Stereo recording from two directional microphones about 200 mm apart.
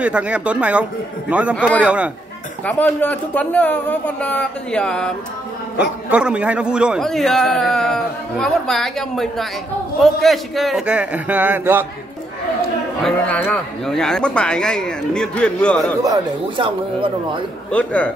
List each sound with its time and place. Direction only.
0.0 s a man's voice: 5° right (ahead or behind)
2.6 s speech: 10° left (ahead or behind)
5.8 s a man's voice: 5° right (ahead or behind)
13.0 s a man's voice: 5° left (ahead or behind)
16.0 s speech: 20° right (ahead or behind)
17.6 s speech: 5° left (ahead or behind)